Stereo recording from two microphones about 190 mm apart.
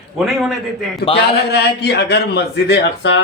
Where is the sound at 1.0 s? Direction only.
30° left (ahead or behind).